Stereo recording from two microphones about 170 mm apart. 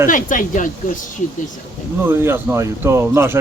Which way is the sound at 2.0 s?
15° right (ahead or behind).